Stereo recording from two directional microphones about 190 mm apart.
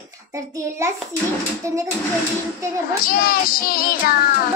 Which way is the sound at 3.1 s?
50° left (ahead or behind).